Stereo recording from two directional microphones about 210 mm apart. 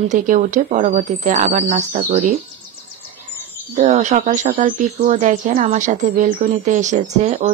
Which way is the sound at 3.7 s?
35° right (ahead or behind).